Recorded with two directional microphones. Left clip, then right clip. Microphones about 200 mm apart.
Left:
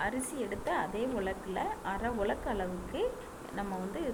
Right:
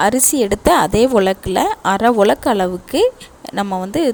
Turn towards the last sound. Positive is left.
turn(degrees=-65)  # may be behind; listen again after turning